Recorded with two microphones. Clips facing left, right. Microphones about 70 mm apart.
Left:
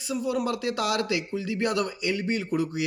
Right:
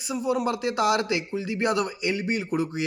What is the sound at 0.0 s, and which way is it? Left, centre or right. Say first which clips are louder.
A man's voice: right 2 dB; right.